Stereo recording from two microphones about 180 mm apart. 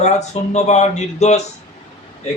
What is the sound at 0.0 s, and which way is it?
Speech, 40° left (ahead or behind).